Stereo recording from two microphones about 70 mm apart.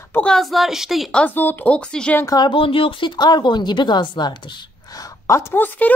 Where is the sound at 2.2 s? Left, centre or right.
Left.